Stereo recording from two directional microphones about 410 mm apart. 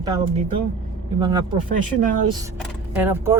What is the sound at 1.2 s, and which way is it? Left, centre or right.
Speech, centre.